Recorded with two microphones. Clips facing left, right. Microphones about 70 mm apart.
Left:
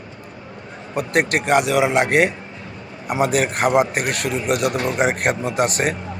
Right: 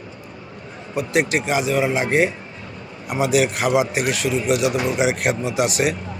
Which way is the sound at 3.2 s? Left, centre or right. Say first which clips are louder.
Even; left.